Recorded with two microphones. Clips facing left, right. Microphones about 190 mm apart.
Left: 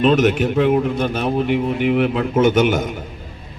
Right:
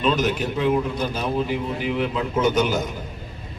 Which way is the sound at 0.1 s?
65° left (ahead or behind).